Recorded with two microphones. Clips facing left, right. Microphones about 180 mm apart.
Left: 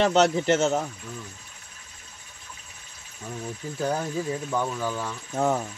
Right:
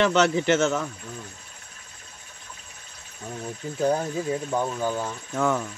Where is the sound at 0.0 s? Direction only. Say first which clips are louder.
Even; 75° right (ahead or behind).